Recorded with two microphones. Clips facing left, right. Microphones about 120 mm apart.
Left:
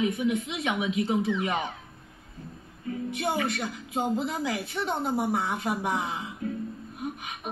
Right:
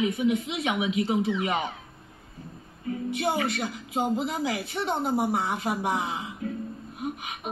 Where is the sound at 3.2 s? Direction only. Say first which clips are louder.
Right 1 dB; 5° right (ahead or behind).